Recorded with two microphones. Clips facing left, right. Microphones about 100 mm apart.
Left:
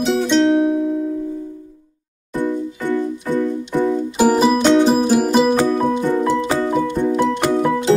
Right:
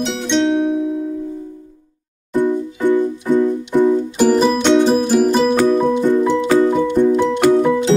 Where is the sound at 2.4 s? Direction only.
20° right (ahead or behind).